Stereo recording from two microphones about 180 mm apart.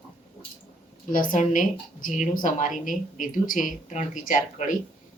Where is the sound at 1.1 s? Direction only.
45° left (ahead or behind).